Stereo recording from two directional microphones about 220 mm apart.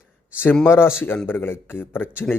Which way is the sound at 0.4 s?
10° left (ahead or behind).